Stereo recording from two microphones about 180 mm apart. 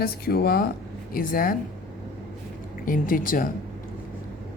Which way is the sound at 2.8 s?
50° left (ahead or behind).